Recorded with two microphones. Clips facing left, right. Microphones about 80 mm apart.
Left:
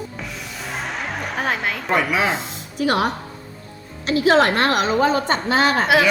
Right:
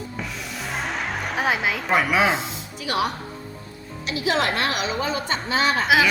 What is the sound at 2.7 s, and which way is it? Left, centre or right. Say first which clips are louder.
A woman's voice: left 5 dB; left.